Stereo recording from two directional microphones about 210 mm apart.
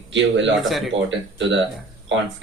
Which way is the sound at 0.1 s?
60° right (ahead or behind).